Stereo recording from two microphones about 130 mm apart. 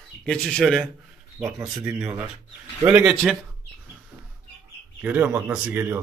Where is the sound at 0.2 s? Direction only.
5° left (ahead or behind).